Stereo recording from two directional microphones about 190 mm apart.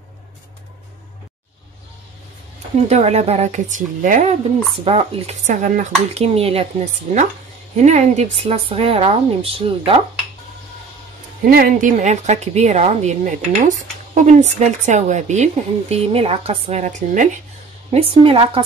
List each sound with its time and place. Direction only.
2.9 s speech: 35° right (ahead or behind)
11.4 s speech: 50° right (ahead or behind)
17.9 s speech: 30° right (ahead or behind)